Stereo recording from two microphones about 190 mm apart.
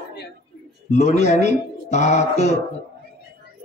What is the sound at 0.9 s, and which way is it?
A man's voice, 35° left (ahead or behind).